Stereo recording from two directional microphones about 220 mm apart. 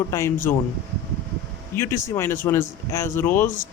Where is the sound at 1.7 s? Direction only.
10° left (ahead or behind).